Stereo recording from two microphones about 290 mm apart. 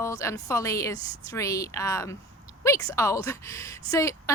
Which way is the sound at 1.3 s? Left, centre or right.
Centre.